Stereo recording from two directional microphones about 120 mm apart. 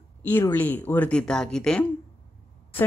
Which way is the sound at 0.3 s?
15° left (ahead or behind).